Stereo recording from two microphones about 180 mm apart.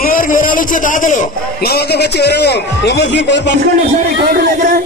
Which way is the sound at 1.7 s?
65° left (ahead or behind).